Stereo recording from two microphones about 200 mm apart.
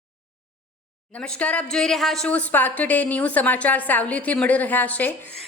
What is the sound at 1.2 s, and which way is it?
A woman's voice, 5° left (ahead or behind).